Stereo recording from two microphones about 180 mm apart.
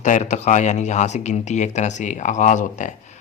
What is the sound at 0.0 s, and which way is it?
Speech, 40° left (ahead or behind).